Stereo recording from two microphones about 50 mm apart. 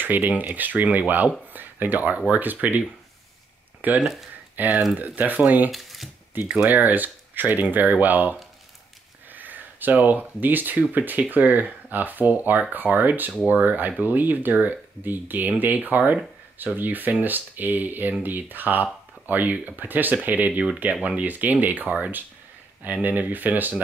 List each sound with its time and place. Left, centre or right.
0.0 s speech: right
3.8 s speech: right
5.7 s a sound: centre
6.6 s speech: right
23.0 s speech: right